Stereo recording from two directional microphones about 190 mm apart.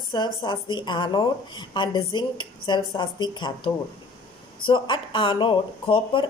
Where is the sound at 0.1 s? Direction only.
25° left (ahead or behind).